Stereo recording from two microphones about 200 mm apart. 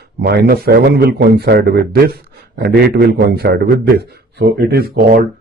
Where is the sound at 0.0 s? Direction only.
55° right (ahead or behind).